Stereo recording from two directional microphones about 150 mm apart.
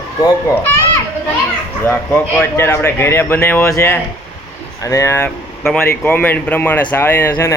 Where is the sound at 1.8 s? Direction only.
15° left (ahead or behind).